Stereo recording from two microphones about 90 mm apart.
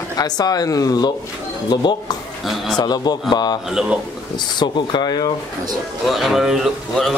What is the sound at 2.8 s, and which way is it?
Speech, 50° left (ahead or behind).